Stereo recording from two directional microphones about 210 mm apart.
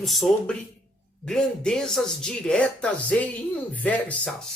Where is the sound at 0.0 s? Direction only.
Centre (ahead or behind).